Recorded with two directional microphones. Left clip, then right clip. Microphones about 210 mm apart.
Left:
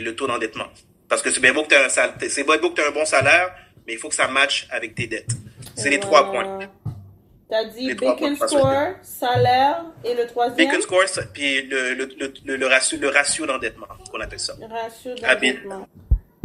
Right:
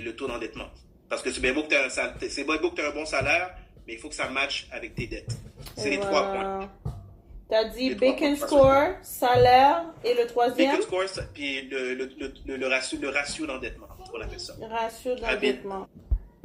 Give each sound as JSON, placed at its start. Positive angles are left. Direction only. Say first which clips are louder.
{"t": 0.0, "sound": "a man's voice", "louder": "left 9 dB", "side_deg": 55}
{"t": 7.5, "sound": "speech", "louder": "left 1 dB", "side_deg": 5}
{"t": 7.9, "sound": "speech", "louder": "left 3 dB", "side_deg": 55}
{"t": 8.6, "sound": "a woman's voice", "louder": "even", "side_deg": 5}
{"t": 10.9, "sound": "a man's voice", "louder": "left 10 dB", "side_deg": 50}
{"t": 14.6, "sound": "speech", "louder": "even", "side_deg": 5}
{"t": 15.1, "sound": "a man's voice", "louder": "left 8 dB", "side_deg": 50}